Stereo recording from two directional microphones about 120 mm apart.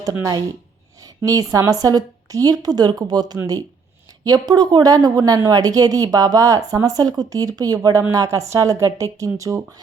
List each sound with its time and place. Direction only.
0.0 s a woman's voice: 30° right (ahead or behind)
1.0 s a sound: 30° right (ahead or behind)
1.5 s a woman's voice: 30° right (ahead or behind)